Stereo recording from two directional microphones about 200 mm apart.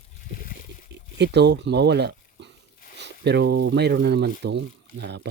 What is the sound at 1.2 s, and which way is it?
Speech, 60° right (ahead or behind).